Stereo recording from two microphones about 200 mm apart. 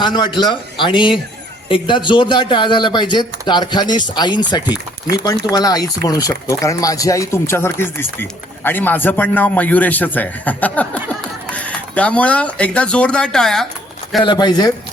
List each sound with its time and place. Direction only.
0.0 s speech: 25° left (ahead or behind); by 13.7 s centre (ahead or behind)
14.2 s speech: 20° left (ahead or behind)